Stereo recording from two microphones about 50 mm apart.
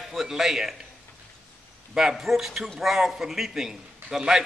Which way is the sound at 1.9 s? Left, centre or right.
Centre.